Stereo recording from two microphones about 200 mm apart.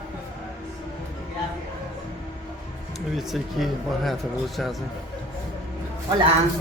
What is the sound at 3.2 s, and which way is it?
Speech, centre (ahead or behind).